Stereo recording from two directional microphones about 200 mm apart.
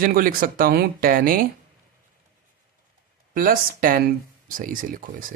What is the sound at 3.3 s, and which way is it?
Speech, 45° right (ahead or behind).